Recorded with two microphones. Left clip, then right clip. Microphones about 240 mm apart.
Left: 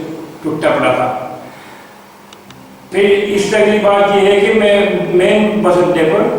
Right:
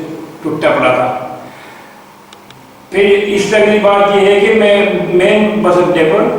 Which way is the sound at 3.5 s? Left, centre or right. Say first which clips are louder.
Right 2 dB; centre.